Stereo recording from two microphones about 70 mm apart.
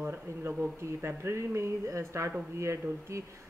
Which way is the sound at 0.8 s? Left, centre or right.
Right.